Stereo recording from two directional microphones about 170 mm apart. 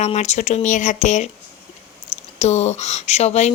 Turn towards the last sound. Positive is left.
turn(degrees=40)  # may be behind; listen again after turning